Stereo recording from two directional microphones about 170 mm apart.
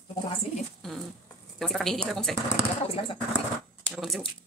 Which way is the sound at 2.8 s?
35° left (ahead or behind).